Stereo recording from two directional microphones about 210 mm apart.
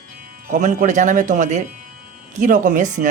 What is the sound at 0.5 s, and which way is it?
Speech, 35° right (ahead or behind).